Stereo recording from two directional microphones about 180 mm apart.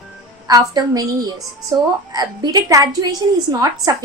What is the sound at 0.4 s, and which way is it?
A woman's voice, 20° right (ahead or behind).